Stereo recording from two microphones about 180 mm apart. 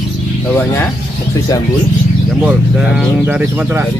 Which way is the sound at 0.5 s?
10° left (ahead or behind).